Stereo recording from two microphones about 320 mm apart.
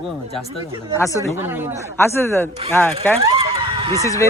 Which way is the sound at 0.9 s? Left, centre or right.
Centre.